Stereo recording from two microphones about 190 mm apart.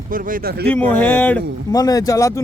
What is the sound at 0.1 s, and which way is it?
Speech, 45° right (ahead or behind).